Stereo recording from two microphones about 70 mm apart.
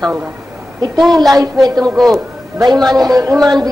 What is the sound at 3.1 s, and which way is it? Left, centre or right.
Speech, right.